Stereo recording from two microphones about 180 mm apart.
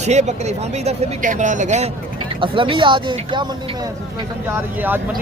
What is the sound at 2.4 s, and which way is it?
Speech, 30° right (ahead or behind).